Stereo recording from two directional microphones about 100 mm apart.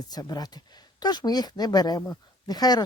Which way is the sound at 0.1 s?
40° left (ahead or behind).